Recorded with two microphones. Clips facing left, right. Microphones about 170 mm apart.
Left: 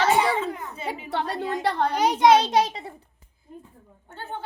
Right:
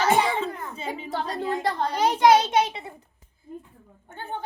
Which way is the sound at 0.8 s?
30° right (ahead or behind).